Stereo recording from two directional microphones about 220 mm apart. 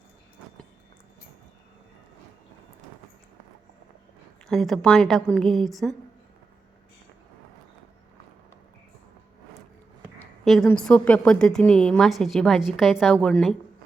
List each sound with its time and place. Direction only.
4.4 s a woman's voice: centre (ahead or behind)
10.2 s a woman's voice: centre (ahead or behind)